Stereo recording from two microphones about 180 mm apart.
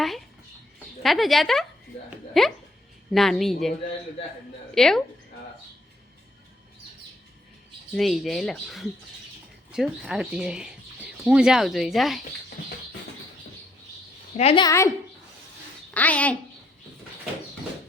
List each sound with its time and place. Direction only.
1.0 s speech: centre (ahead or behind)
7.9 s speech: centre (ahead or behind)
14.3 s a woman's voice: 30° left (ahead or behind)
16.0 s speech: 10° left (ahead or behind)